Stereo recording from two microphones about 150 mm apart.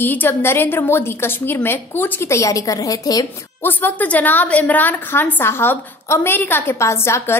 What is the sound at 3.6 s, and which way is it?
A woman's voice, 10° left (ahead or behind).